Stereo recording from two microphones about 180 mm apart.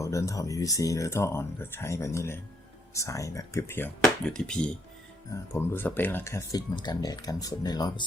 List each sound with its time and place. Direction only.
0.0 s speech: 15° left (ahead or behind)